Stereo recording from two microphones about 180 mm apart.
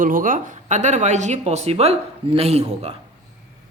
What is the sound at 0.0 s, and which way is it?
Speech, 50° right (ahead or behind).